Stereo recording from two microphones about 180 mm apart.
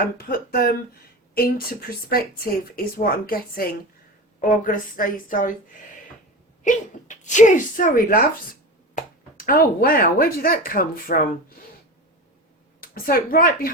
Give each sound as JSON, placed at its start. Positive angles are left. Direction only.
{"t": 0.0, "sound": "speech", "side_deg": 55}
{"t": 2.0, "sound": "a woman's voice", "side_deg": 55}
{"t": 6.6, "sound": "a woman's voice", "side_deg": 45}
{"t": 12.8, "sound": "a woman's voice", "side_deg": 55}